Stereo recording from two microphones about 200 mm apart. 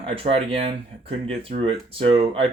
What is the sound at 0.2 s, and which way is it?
Speech, 30° right (ahead or behind).